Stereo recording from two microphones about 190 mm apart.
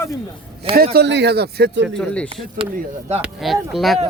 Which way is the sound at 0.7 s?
60° right (ahead or behind).